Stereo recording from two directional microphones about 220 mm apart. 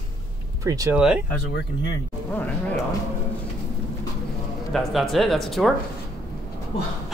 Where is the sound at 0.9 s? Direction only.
5° right (ahead or behind).